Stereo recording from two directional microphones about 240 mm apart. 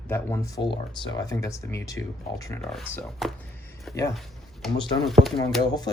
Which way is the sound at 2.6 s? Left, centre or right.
Centre.